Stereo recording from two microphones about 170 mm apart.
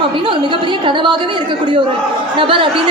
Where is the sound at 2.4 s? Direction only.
30° right (ahead or behind).